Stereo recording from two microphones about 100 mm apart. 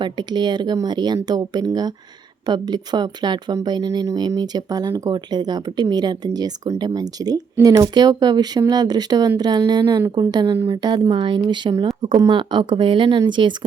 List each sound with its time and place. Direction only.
0.0 s speech: 45° right (ahead or behind)